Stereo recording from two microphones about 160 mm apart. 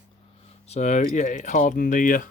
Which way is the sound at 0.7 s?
50° left (ahead or behind).